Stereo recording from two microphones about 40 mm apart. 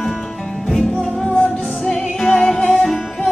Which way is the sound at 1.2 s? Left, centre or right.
Left.